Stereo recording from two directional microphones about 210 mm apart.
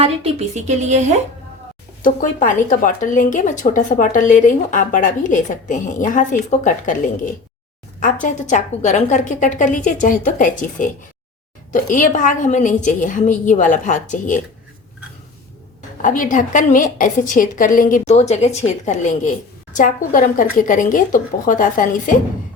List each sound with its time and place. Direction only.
0.3 s speech: 35° right (ahead or behind)
2.0 s a woman's voice: 40° left (ahead or behind)
16.0 s a woman's voice: 40° left (ahead or behind)